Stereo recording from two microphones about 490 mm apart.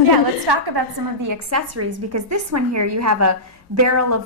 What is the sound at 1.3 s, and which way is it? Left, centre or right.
A woman's voice, right.